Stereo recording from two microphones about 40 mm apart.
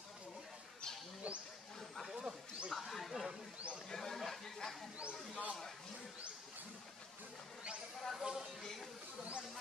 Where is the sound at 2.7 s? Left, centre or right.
Centre.